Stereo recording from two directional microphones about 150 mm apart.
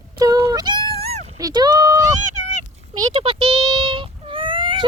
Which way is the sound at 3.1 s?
35° right (ahead or behind).